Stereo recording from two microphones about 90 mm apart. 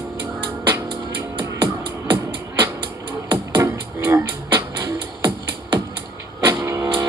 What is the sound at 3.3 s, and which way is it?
Music, 35° right (ahead or behind).